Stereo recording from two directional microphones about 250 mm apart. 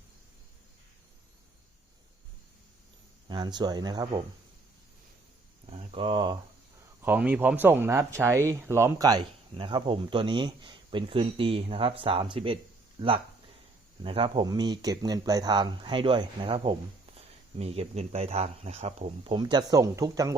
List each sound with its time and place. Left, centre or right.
3.2 s speech: centre
5.7 s speech: right
7.0 s speech: centre